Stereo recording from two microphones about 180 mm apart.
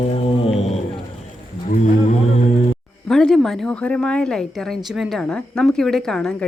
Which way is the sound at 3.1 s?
5° left (ahead or behind).